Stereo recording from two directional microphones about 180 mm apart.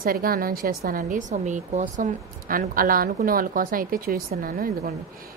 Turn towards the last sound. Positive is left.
turn(degrees=-55)  # may be behind; listen again after turning